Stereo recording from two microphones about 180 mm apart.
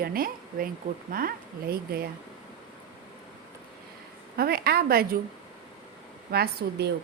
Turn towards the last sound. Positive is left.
turn(degrees=-65)  # may be behind; listen again after turning